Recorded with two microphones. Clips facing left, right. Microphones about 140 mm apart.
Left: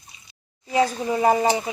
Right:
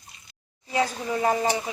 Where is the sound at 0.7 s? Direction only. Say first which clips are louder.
Left 4 dB; 20° left (ahead or behind).